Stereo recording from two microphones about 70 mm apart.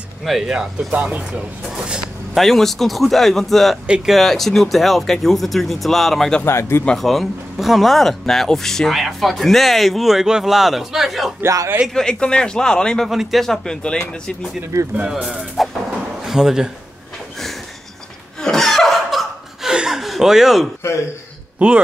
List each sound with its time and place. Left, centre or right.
0.2 s speech: centre
2.3 s speech: centre
3.8 s speech: centre
4.1 s speech: centre
6.4 s speech: left
7.0 s speech: centre
11.4 s a man's voice: right
11.9 s speech: centre
13.1 s speech: centre
15.0 s speech: centre
15.2 s speech: centre
18.4 s laughter: centre
19.7 s chuckle: centre
21.5 s speech: centre